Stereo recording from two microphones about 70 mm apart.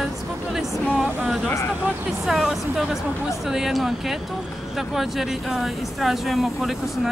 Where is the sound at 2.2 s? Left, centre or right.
Centre.